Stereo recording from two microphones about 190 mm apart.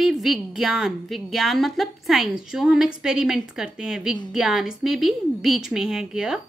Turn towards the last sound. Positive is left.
turn(degrees=-5)  # may be behind; listen again after turning